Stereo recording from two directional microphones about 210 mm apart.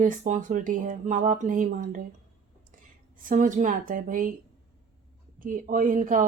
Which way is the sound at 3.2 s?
35° right (ahead or behind).